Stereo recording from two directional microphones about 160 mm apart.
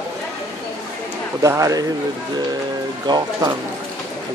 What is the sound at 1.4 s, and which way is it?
Speech, 20° right (ahead or behind).